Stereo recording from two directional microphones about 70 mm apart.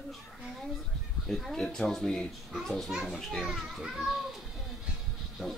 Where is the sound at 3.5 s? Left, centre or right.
Centre.